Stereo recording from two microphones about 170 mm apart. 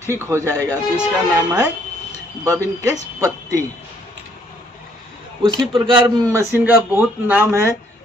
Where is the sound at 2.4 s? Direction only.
20° right (ahead or behind).